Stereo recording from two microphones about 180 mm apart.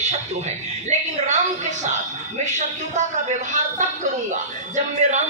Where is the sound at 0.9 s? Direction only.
40° right (ahead or behind).